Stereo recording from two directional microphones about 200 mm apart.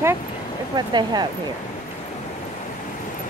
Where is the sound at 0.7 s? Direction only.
20° right (ahead or behind).